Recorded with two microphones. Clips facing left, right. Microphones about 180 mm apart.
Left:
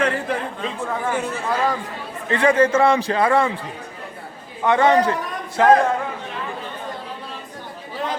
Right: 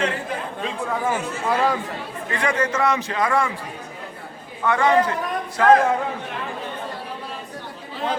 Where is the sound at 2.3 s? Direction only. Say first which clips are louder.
Left 7 dB; 30° left (ahead or behind).